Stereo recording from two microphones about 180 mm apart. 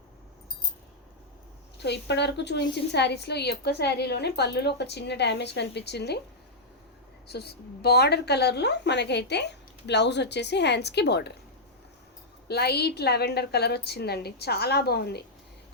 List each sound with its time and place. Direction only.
1.8 s a woman's voice: 70° left (ahead or behind)
7.3 s a woman's voice: 65° left (ahead or behind)
12.5 s a woman's voice: 65° left (ahead or behind)